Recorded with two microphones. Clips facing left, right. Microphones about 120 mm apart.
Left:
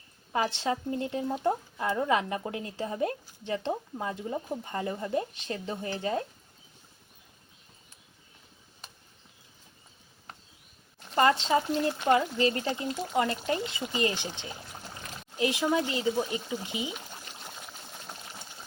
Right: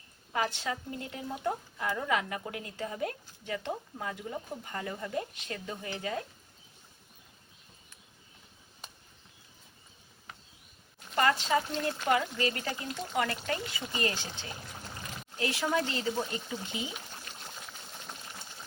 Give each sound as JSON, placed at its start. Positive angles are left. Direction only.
{"t": 0.3, "sound": "speech", "side_deg": 25}
{"t": 11.1, "sound": "speech", "side_deg": 25}